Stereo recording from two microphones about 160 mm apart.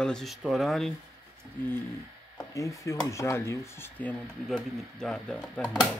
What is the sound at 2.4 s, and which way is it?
Speech, 20° left (ahead or behind).